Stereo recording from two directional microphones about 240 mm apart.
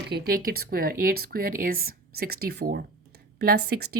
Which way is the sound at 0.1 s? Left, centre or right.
Right.